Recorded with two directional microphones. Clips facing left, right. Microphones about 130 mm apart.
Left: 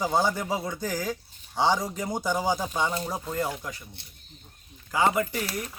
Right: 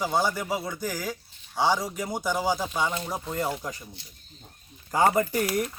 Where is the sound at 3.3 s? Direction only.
15° right (ahead or behind).